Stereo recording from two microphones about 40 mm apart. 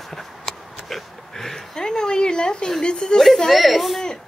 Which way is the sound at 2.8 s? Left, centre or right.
Left.